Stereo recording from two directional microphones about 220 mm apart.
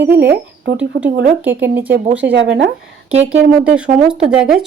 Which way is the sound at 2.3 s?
55° right (ahead or behind).